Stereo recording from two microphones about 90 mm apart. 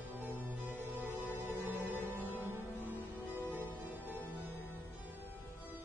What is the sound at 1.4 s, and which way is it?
Music, 20° right (ahead or behind).